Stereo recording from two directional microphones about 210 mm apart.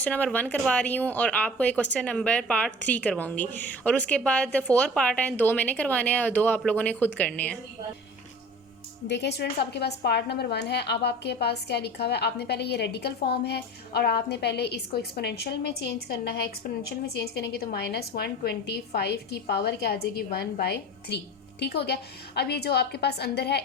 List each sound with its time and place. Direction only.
0.0 s speech: 5° left (ahead or behind)
9.0 s a woman's voice: 55° left (ahead or behind)